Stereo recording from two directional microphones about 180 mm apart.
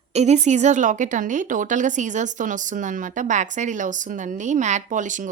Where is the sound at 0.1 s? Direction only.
40° right (ahead or behind).